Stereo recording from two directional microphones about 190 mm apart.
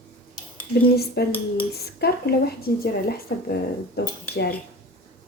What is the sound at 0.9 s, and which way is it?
Speech, 55° left (ahead or behind).